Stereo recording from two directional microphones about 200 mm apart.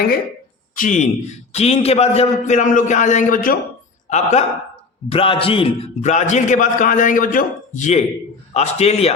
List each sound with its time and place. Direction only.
0.8 s a man's voice: 40° left (ahead or behind)
4.1 s a man's voice: 35° left (ahead or behind)